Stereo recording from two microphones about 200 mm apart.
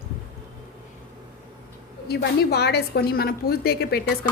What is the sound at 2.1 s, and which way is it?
A woman's voice, 55° left (ahead or behind).